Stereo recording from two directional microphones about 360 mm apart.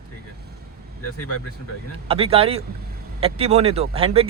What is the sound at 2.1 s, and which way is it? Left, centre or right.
Speech, centre.